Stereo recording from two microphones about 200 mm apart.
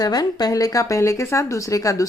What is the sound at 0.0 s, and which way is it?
Speech, 20° left (ahead or behind).